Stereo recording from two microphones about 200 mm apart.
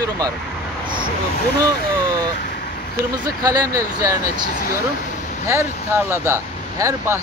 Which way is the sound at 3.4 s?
20° right (ahead or behind).